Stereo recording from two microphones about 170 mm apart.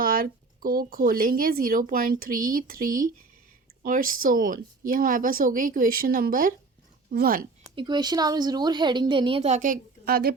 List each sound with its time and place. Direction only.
0.0 s speech: 55° right (ahead or behind)
7.8 s a woman's voice: 25° right (ahead or behind); by 10.3 s 65° right (ahead or behind)